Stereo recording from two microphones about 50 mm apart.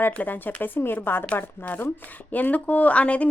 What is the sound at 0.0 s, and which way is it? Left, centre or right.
Speech, left.